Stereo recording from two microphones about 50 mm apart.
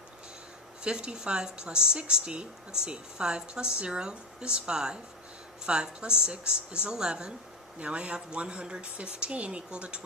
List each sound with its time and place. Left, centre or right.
0.9 s a woman's voice: centre